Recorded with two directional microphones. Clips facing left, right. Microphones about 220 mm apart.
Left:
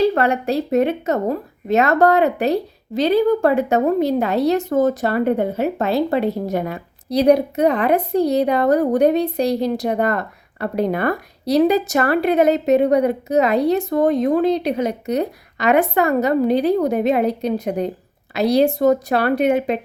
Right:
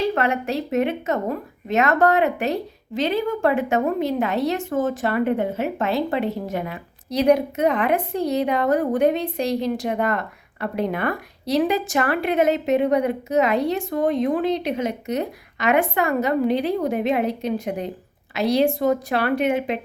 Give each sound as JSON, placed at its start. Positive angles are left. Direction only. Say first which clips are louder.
{"t": 0.0, "sound": "a woman's voice", "louder": "left 5 dB", "side_deg": 35}